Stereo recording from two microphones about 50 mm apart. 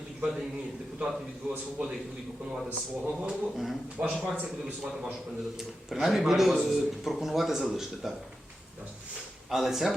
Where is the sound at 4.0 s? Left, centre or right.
Right.